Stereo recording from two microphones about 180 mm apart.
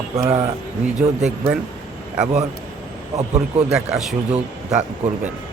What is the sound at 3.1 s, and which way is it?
Speech, 40° right (ahead or behind).